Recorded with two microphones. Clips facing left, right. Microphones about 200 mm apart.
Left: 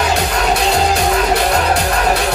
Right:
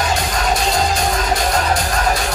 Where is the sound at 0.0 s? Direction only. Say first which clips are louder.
Left 3 dB; 65° left (ahead or behind).